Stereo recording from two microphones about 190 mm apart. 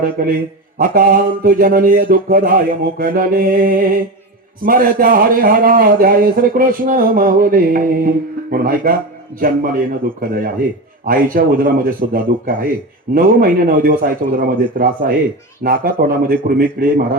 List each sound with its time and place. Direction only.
0.0 s a man's voice: 50° right (ahead or behind)